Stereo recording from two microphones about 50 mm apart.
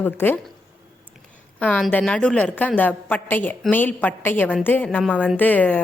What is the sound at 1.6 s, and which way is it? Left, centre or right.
Speech, left.